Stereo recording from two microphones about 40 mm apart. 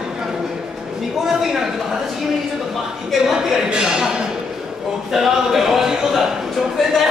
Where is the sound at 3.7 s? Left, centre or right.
Centre.